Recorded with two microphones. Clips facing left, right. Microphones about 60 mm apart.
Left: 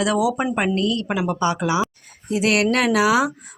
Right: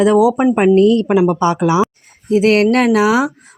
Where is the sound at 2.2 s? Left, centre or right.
Right.